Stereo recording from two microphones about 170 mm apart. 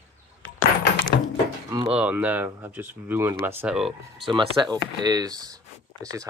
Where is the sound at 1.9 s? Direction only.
10° right (ahead or behind).